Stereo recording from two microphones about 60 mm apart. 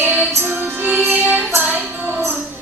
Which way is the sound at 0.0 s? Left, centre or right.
Right.